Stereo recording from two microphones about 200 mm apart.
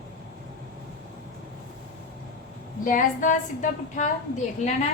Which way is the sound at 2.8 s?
40° left (ahead or behind).